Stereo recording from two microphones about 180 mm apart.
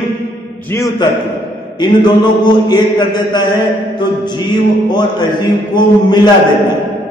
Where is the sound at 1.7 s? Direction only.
25° left (ahead or behind).